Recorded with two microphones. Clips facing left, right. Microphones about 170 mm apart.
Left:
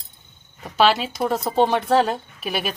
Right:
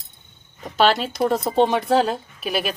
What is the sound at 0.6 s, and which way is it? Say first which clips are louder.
Speech: even; 5° left (ahead or behind).